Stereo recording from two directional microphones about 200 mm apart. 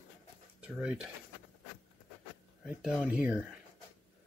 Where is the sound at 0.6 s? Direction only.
5° right (ahead or behind).